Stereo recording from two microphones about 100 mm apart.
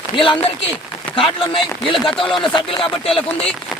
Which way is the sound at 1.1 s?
60° left (ahead or behind).